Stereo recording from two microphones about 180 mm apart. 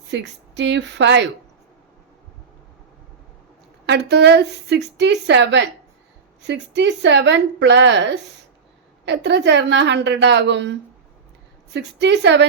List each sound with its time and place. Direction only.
0.1 s a woman's voice: 75° right (ahead or behind)
3.8 s a woman's voice: 70° right (ahead or behind)